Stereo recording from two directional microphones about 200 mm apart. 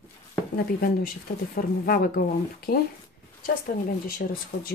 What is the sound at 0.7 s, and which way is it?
Speech, 50° left (ahead or behind).